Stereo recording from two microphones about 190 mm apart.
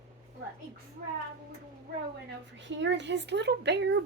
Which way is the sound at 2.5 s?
70° right (ahead or behind).